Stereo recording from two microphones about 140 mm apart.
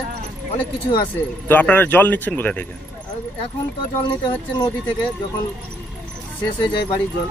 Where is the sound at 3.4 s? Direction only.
35° left (ahead or behind).